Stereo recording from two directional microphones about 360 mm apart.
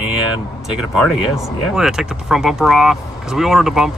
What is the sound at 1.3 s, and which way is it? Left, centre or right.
Speech, centre.